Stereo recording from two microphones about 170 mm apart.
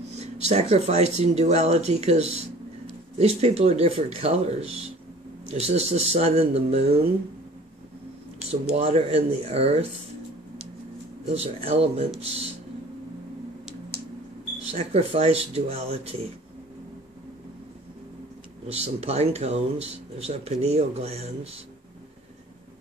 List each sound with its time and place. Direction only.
0.1 s speech: 40° right (ahead or behind)
8.7 s speech: 35° right (ahead or behind)
11.3 s speech: 35° right (ahead or behind)
14.7 s speech: 35° right (ahead or behind)
18.7 s speech: 35° right (ahead or behind)